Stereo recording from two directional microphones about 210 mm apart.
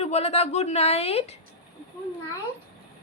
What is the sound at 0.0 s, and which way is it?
A woman's voice, 30° left (ahead or behind).